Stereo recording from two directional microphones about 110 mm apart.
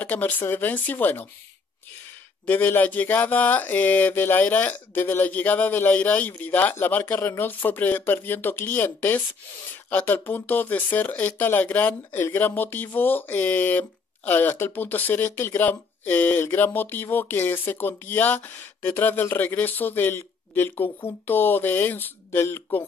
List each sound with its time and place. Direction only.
0.0 s speech: 15° left (ahead or behind)
2.4 s speech: 15° left (ahead or behind)